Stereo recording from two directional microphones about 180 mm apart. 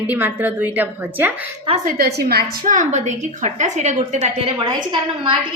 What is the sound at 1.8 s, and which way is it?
Speech, 55° right (ahead or behind).